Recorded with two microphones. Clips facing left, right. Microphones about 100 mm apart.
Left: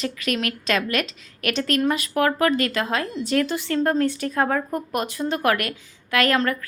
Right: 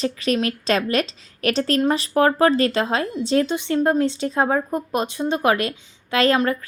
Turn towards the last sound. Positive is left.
turn(degrees=-25)  # may be behind; listen again after turning